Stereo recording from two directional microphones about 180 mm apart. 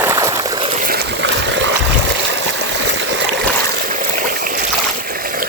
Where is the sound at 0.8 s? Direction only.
70° right (ahead or behind); by 1.7 s 85° right.